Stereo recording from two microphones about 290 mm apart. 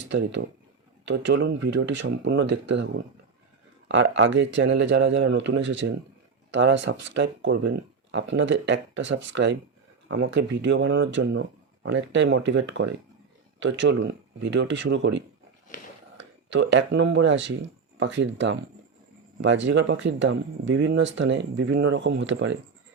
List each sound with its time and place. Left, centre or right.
0.1 s speech: right
13.6 s speech: right